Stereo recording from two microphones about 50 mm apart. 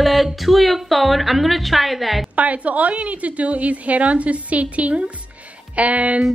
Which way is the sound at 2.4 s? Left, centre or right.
Right.